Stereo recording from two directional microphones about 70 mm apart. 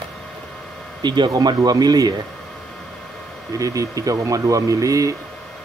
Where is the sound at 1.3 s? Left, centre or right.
Right.